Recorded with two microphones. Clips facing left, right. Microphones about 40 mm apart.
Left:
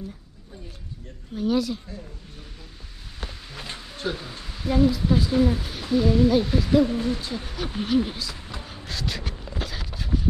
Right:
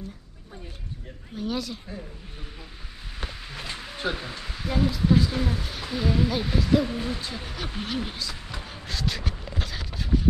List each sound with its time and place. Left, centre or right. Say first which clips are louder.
1.3 s speech: left 7 dB; centre
3.2 s speech: right 1 dB; centre
4.6 s speech: left 5 dB; centre
7.2 s a sound: left 3 dB; centre